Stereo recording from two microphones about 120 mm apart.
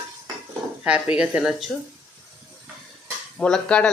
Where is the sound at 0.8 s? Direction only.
10° right (ahead or behind).